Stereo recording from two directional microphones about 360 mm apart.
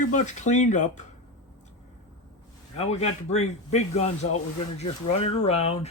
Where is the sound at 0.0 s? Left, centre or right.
Centre.